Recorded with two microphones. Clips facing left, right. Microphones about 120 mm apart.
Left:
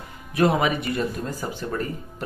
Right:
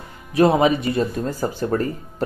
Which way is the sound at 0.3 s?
25° right (ahead or behind).